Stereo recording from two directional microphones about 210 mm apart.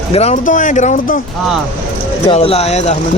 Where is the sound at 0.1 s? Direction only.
30° left (ahead or behind).